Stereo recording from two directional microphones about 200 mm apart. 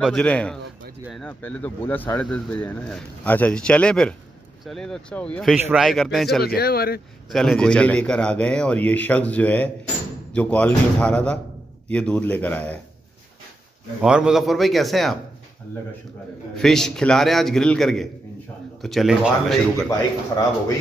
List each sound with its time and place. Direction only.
0.0 s a man's voice: 5° left (ahead or behind)
6.4 s speech: 50° left (ahead or behind)
7.3 s a man's voice: 5° left (ahead or behind)
14.0 s a man's voice: 5° right (ahead or behind)
16.5 s a man's voice: centre (ahead or behind)